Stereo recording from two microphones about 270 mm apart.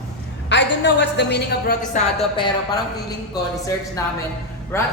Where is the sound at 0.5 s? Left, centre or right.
Left.